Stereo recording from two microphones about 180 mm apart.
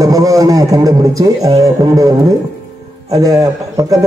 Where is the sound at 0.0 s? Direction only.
20° right (ahead or behind).